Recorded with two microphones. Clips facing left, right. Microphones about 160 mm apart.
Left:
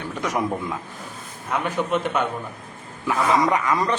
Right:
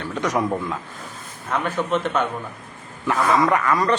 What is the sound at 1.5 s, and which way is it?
Speech, 15° left (ahead or behind).